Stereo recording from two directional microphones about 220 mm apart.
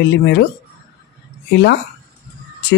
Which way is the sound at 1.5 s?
50° left (ahead or behind).